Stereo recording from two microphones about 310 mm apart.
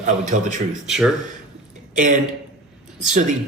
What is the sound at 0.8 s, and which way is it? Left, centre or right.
Speech, centre.